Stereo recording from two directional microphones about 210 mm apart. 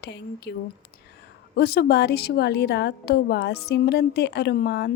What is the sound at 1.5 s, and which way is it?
Speech, 50° left (ahead or behind).